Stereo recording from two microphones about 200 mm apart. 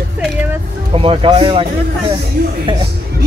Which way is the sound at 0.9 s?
25° right (ahead or behind).